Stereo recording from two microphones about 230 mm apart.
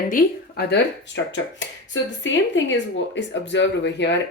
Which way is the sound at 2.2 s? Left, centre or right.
Left.